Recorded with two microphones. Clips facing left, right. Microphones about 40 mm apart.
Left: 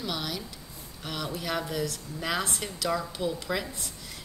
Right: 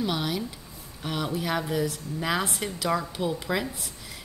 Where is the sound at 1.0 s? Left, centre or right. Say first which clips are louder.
Right 4 dB; centre.